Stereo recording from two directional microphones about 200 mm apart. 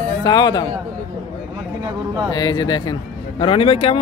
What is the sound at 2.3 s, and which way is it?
Speech, 20° left (ahead or behind).